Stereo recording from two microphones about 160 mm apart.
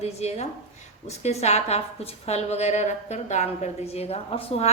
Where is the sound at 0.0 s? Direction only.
40° left (ahead or behind).